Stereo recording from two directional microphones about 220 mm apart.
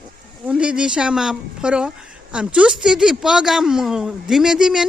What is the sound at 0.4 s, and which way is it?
Speech, 5° right (ahead or behind).